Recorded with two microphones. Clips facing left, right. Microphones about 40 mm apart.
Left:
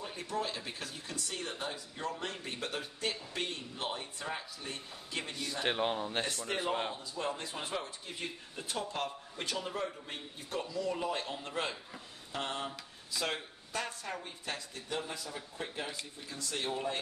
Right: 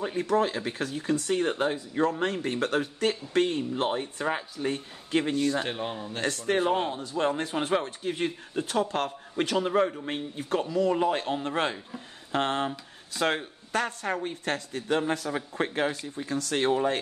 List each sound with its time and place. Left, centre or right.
0.3 s speech: right
5.7 s speech: centre
6.2 s speech: right